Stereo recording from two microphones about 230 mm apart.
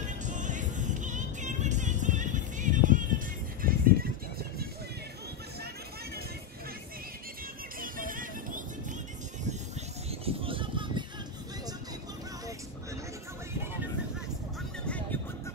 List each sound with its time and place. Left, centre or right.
0.0 s music: right
7.8 s music: right
10.2 s a sound: right